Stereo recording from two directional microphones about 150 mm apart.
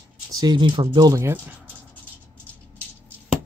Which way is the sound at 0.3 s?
25° right (ahead or behind).